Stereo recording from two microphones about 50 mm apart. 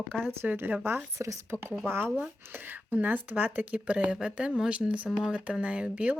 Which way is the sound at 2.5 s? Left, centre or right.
Right.